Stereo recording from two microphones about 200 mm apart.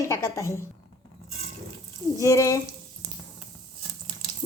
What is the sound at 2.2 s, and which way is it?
Speech, 15° left (ahead or behind).